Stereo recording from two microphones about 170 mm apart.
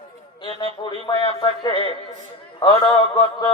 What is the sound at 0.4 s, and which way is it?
A man's voice, 30° left (ahead or behind).